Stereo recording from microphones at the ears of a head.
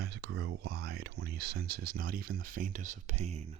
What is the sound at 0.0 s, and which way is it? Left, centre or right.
Speech, right.